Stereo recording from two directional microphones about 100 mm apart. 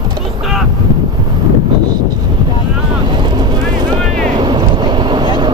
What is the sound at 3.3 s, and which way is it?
Vehicle, 45° right (ahead or behind).